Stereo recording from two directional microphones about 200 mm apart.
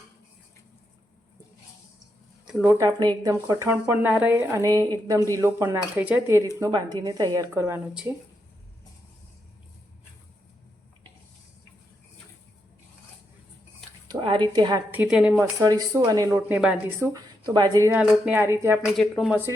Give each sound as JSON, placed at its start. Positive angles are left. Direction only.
{"t": 2.5, "sound": "a woman's voice", "side_deg": -5}
{"t": 14.1, "sound": "speech", "side_deg": -25}
{"t": 14.8, "sound": "speech", "side_deg": -5}
{"t": 16.3, "sound": "speech", "side_deg": -5}
{"t": 17.1, "sound": "speech", "side_deg": -20}